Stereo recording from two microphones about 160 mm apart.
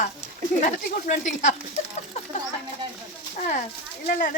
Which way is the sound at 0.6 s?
60° left (ahead or behind).